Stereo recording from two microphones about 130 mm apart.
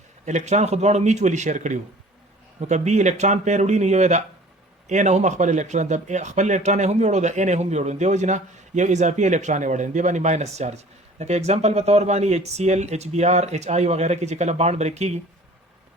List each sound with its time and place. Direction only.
0.3 s a man's voice: 65° right (ahead or behind)